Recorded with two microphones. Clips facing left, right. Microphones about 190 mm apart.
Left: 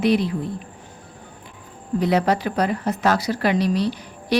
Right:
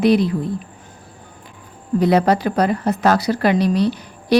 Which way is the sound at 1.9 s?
40° right (ahead or behind).